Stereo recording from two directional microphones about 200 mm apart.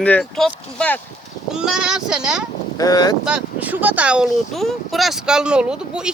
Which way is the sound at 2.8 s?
20° left (ahead or behind).